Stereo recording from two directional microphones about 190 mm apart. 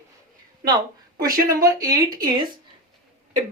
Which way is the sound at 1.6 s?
15° right (ahead or behind).